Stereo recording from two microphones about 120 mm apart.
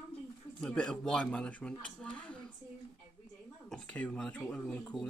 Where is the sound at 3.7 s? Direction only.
5° left (ahead or behind).